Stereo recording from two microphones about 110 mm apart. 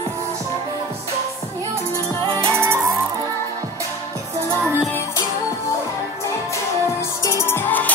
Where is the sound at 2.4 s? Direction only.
25° right (ahead or behind).